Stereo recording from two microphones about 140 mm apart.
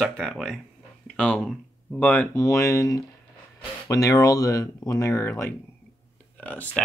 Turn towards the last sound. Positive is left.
turn(degrees=10)  # may be behind; listen again after turning